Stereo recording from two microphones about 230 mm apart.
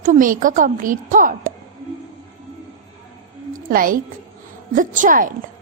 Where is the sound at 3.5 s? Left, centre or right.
Right.